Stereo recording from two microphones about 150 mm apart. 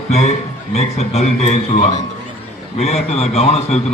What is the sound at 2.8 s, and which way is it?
A man's voice, 45° left (ahead or behind).